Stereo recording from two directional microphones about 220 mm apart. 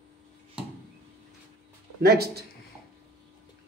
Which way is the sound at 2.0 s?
45° right (ahead or behind).